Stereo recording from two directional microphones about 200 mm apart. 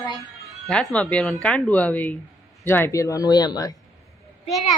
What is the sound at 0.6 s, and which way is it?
Speech, 5° left (ahead or behind).